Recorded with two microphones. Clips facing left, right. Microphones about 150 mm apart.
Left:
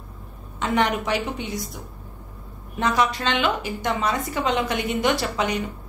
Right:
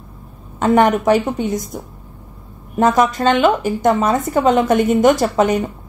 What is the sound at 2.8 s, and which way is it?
Speech, 45° right (ahead or behind).